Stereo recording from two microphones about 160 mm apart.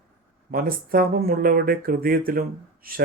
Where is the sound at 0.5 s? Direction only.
65° right (ahead or behind).